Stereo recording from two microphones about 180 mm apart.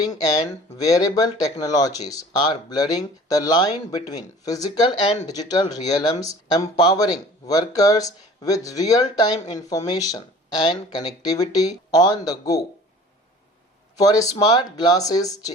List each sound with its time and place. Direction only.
0.0 s speech: 20° left (ahead or behind)
14.0 s speech: 20° left (ahead or behind)